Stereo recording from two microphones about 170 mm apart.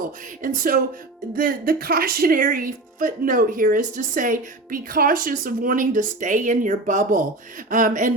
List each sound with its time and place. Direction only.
0.0 s speech: 55° right (ahead or behind)